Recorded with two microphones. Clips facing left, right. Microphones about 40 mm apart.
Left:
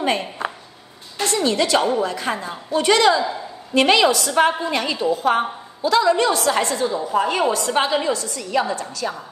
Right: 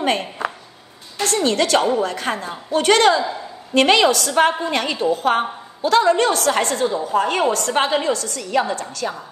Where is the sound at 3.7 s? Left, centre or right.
Right.